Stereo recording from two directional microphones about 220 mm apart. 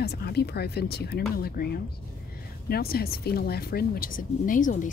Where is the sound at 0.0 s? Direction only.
45° left (ahead or behind).